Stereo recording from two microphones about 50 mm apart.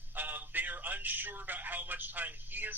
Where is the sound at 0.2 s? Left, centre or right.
Right.